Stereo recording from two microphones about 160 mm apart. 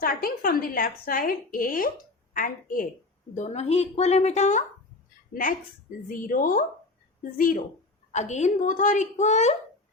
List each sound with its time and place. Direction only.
0.0 s a woman's voice: 65° left (ahead or behind)
3.3 s speech: 45° left (ahead or behind)
5.3 s a woman's voice: 60° left (ahead or behind)
8.1 s speech: 45° left (ahead or behind)